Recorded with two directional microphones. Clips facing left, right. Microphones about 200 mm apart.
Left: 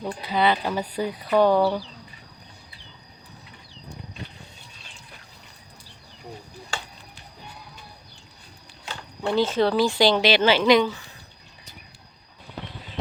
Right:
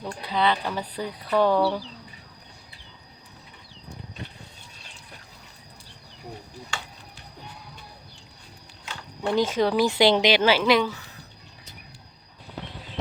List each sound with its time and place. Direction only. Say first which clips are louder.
0.0 s speech: left 2 dB; 10° left (ahead or behind)
9.2 s a woman's voice: left 1 dB; 15° right (ahead or behind)